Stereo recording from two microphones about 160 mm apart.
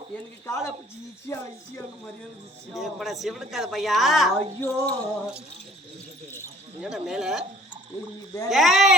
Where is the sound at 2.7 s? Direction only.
Centre (ahead or behind).